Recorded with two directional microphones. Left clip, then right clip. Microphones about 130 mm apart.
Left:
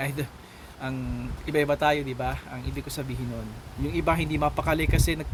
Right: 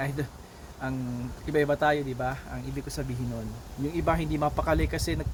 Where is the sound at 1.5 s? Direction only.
30° left (ahead or behind).